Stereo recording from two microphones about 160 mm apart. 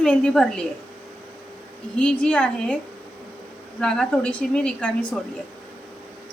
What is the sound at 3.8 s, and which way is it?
A woman's voice, 5° left (ahead or behind).